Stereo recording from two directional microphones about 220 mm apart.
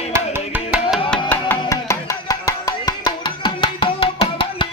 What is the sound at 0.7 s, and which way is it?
Music, centre (ahead or behind).